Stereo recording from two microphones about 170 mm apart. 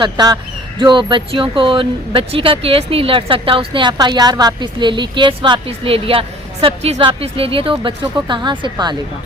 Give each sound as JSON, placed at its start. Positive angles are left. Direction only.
{"t": 0.0, "sound": "speech", "side_deg": -25}